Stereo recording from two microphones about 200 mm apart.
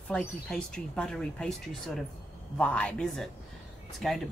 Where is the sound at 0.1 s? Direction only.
5° left (ahead or behind).